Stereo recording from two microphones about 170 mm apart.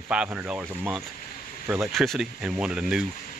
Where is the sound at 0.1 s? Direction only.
5° right (ahead or behind).